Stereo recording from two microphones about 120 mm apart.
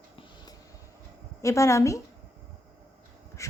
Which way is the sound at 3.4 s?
25° left (ahead or behind).